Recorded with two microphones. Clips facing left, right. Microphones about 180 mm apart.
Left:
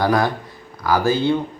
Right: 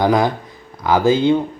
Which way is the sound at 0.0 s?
20° right (ahead or behind).